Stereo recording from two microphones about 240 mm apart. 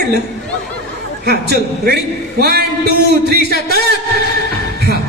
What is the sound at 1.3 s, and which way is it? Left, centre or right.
A man's voice, right.